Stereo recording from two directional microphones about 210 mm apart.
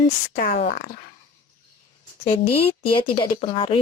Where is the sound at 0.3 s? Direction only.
45° left (ahead or behind).